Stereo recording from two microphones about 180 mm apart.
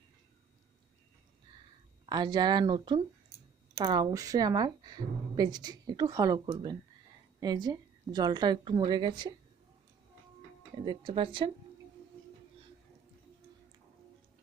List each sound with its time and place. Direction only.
2.0 s a woman's voice: 25° right (ahead or behind)
10.8 s a woman's voice: 30° right (ahead or behind)